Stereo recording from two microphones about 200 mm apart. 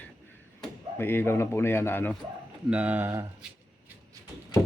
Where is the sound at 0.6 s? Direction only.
10° left (ahead or behind).